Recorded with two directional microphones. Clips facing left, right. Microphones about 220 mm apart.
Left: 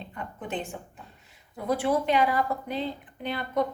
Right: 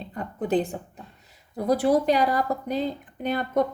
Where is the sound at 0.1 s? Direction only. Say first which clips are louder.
Right 11 dB; 35° right (ahead or behind).